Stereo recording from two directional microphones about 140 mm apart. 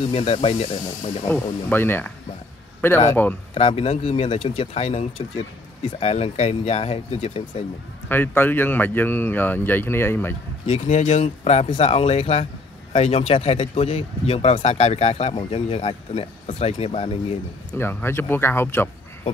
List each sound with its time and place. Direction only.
0.1 s speech: 45° left (ahead or behind)
1.2 s speech: 15° left (ahead or behind)
3.5 s speech: 45° left (ahead or behind)
8.1 s speech: 15° left (ahead or behind)
10.7 s speech: 55° left (ahead or behind)
17.7 s speech: 15° left (ahead or behind)